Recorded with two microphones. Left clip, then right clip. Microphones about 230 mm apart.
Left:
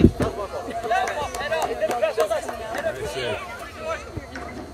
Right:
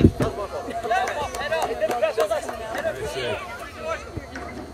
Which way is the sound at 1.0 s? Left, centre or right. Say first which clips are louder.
Even; left.